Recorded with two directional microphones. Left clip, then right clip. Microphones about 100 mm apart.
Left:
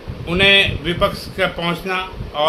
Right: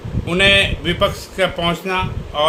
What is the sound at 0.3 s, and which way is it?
Speech, 25° right (ahead or behind).